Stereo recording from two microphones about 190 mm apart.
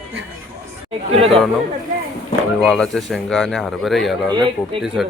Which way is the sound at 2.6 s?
Centre (ahead or behind).